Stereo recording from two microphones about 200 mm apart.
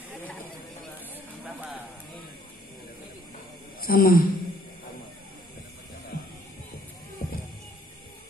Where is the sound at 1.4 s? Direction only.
5° right (ahead or behind).